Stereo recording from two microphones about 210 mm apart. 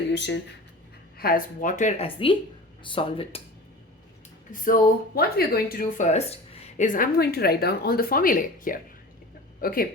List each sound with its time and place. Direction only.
0.1 s speech: 55° left (ahead or behind)
1.2 s speech: 45° left (ahead or behind); by 3.4 s 25° left (ahead or behind)
4.5 s speech: 40° left (ahead or behind)